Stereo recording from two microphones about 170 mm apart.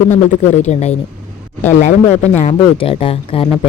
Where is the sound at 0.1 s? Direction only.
45° left (ahead or behind).